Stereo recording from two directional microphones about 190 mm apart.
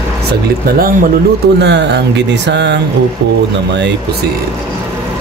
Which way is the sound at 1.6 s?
65° right (ahead or behind).